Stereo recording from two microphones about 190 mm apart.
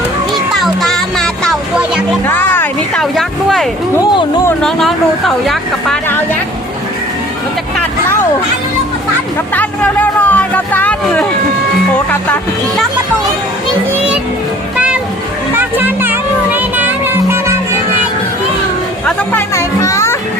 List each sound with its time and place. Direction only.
0.5 s music: centre (ahead or behind)
4.0 s a sound: 25° left (ahead or behind)
4.6 s speech: centre (ahead or behind)
9.6 s speech: 10° left (ahead or behind)
15.5 s music: 10° right (ahead or behind)
19.0 s speech: 15° left (ahead or behind)